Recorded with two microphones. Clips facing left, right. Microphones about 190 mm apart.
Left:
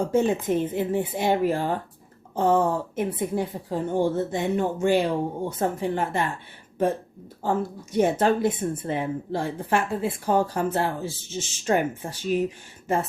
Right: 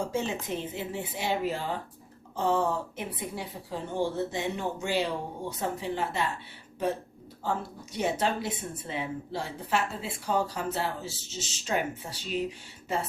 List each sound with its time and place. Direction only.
0.1 s a woman's voice: 50° left (ahead or behind)
7.4 s a woman's voice: 50° left (ahead or behind)